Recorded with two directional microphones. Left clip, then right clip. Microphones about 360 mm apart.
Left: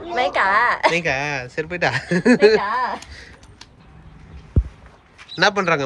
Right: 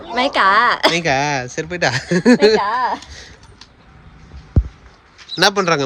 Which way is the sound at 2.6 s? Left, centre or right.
Right.